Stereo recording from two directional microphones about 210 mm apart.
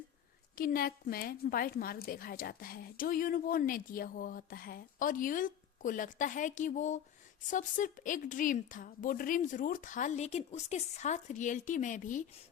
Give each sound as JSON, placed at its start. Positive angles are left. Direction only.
{"t": 0.5, "sound": "a woman's voice", "side_deg": 45}